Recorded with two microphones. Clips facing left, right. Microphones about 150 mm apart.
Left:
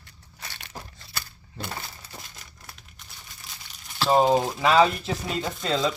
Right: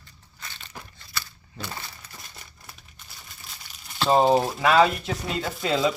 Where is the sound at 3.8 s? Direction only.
Centre (ahead or behind).